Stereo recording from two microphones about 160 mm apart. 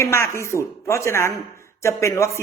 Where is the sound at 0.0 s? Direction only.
15° left (ahead or behind).